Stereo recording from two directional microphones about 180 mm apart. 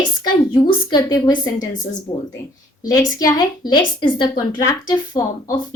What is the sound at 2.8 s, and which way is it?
A woman's voice, 20° left (ahead or behind).